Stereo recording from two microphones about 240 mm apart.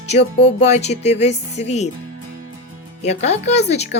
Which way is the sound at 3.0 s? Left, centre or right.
Left.